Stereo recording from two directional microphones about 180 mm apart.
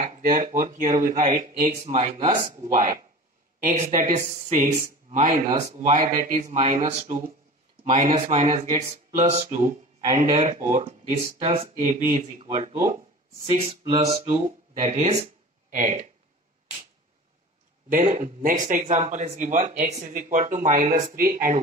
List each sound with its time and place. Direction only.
0.0 s speech: 45° right (ahead or behind)
3.5 s speech: 45° right (ahead or behind)
17.8 s speech: 45° right (ahead or behind)